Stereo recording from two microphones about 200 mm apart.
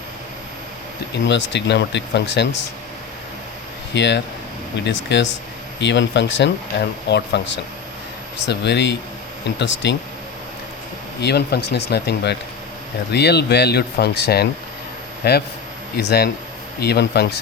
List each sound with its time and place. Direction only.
1.3 s speech: 60° left (ahead or behind)
3.9 s speech: 60° left (ahead or behind)
11.2 s speech: 55° left (ahead or behind)